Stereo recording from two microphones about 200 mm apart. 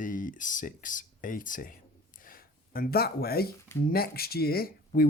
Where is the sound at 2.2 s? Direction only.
45° left (ahead or behind).